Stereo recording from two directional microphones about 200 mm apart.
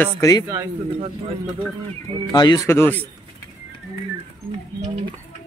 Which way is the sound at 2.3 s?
20° left (ahead or behind).